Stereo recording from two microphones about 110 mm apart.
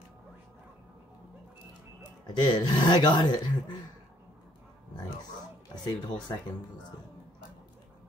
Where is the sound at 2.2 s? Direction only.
40° left (ahead or behind).